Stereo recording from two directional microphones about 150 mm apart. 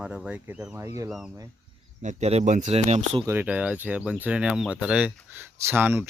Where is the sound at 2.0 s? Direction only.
50° right (ahead or behind).